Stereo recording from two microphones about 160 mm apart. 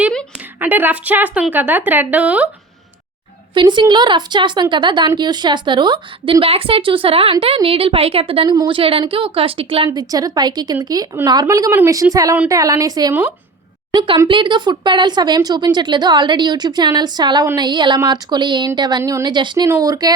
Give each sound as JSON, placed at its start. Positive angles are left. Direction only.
{"t": 0.3, "sound": "a woman's voice", "side_deg": -10}
{"t": 3.5, "sound": "a woman's voice", "side_deg": -30}